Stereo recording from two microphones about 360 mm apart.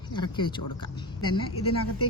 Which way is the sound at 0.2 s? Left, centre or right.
Centre.